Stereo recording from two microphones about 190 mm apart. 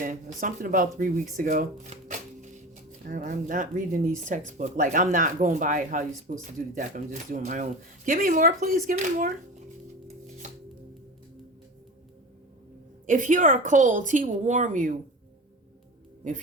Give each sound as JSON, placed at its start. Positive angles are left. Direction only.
{"t": 0.0, "sound": "speech", "side_deg": -45}
{"t": 13.1, "sound": "speech", "side_deg": -45}